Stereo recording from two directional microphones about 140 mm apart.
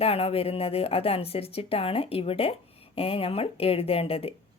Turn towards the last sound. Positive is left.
turn(degrees=45)  # may be behind; listen again after turning